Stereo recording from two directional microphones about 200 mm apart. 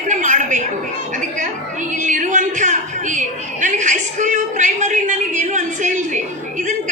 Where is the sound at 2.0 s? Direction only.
40° right (ahead or behind).